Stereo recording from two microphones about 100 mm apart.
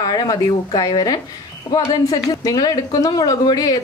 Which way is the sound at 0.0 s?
40° left (ahead or behind).